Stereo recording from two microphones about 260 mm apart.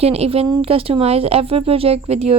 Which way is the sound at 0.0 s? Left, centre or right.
Right.